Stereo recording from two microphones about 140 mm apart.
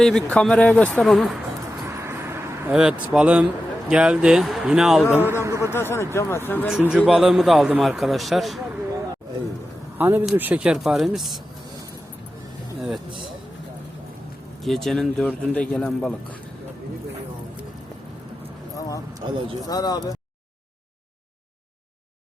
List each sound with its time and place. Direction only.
0.0 s speech: 5° left (ahead or behind)
2.0 s vehicle: 20° right (ahead or behind)
2.7 s speech: 5° right (ahead or behind)
5.2 s a man's voice: 15° right (ahead or behind)
5.7 s speech: 15° left (ahead or behind)
6.9 s speech: 5° right (ahead or behind)
10.0 s speech: 15° right (ahead or behind)
14.6 s speech: centre (ahead or behind)
18.8 s speech: 25° left (ahead or behind)
19.2 s speech: 35° right (ahead or behind)
19.6 s speech: 25° left (ahead or behind)